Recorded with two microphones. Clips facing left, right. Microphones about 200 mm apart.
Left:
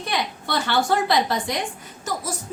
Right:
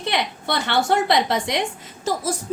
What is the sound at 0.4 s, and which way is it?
A woman's voice, 20° right (ahead or behind).